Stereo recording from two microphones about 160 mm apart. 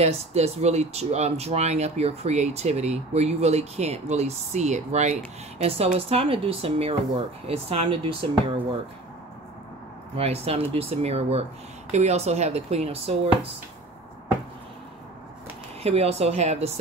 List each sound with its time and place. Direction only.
0.0 s speech: 40° right (ahead or behind)
10.1 s speech: 40° right (ahead or behind)
15.8 s speech: 40° right (ahead or behind)